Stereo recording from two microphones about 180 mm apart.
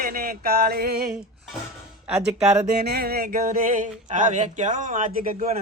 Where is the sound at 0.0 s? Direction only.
55° right (ahead or behind).